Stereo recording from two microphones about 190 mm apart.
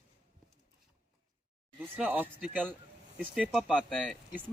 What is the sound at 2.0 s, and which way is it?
Speech, 10° right (ahead or behind).